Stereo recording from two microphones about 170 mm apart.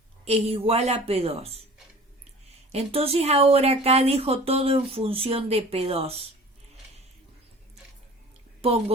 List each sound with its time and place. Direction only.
0.3 s speech: 35° right (ahead or behind)
2.7 s speech: 35° right (ahead or behind)